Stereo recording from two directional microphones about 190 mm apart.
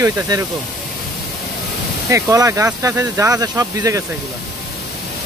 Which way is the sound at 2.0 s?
15° right (ahead or behind).